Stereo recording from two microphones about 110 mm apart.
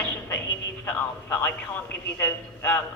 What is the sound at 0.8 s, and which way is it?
A woman's voice, 15° left (ahead or behind).